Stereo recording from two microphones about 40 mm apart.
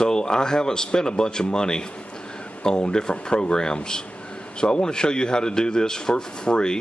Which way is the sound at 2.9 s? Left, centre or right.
Centre.